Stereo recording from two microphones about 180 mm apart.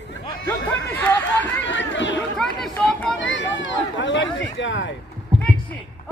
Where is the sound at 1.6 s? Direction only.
90° left.